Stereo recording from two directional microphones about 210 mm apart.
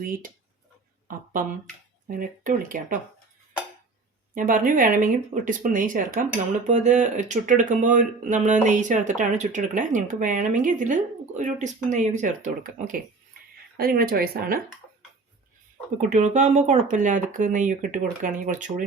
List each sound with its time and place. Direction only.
0.0 s speech: 40° right (ahead or behind)
4.4 s speech: 40° right (ahead or behind)
16.0 s speech: 35° right (ahead or behind)